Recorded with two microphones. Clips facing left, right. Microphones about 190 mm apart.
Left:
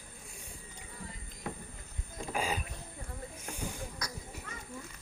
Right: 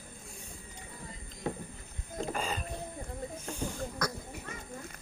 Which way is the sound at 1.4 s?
30° right (ahead or behind).